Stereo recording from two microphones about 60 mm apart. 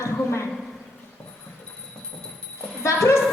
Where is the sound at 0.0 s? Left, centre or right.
Left.